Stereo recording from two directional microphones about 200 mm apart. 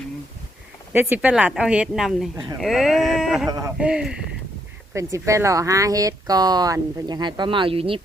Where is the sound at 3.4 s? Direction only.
15° right (ahead or behind).